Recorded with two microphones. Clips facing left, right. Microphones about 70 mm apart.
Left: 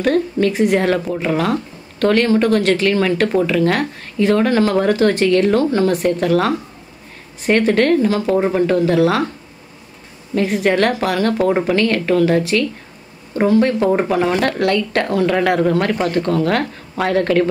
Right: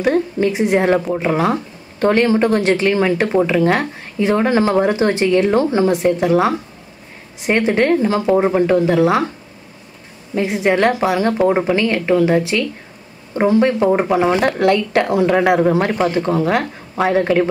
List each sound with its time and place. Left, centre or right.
0.0 s speech: centre
10.3 s speech: centre